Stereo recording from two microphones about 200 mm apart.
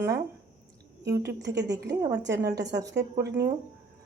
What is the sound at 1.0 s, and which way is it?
Speech, 15° right (ahead or behind).